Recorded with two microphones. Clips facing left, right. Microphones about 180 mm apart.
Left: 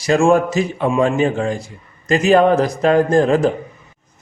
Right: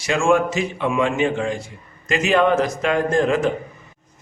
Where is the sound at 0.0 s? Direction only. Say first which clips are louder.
Left 4 dB; 35° left (ahead or behind).